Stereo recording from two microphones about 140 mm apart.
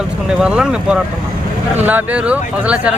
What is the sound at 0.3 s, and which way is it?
Speech, 5° right (ahead or behind).